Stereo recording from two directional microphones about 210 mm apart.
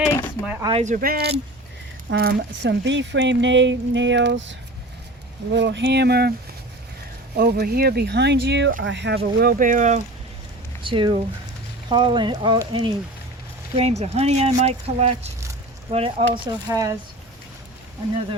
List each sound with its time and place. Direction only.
0.0 s a sound: 15° left (ahead or behind)
0.4 s speech: 10° right (ahead or behind)
0.7 s speech: 35° right (ahead or behind); by 6.3 s 50° right (ahead or behind)
7.3 s speech: 50° right (ahead or behind)
10.8 s speech: 25° right (ahead or behind)
16.6 s speech: 15° right (ahead or behind)